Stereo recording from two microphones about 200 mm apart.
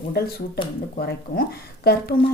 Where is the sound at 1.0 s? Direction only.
50° left (ahead or behind).